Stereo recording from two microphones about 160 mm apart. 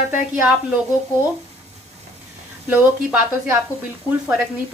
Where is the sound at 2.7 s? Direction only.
10° right (ahead or behind).